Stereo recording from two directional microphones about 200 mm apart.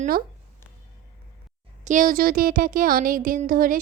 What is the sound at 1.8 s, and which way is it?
Speech, 40° right (ahead or behind).